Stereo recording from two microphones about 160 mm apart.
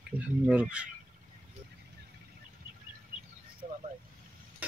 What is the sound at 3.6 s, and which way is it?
Vehicle, 55° right (ahead or behind).